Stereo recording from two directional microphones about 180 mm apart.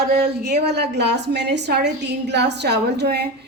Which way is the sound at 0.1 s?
65° right (ahead or behind).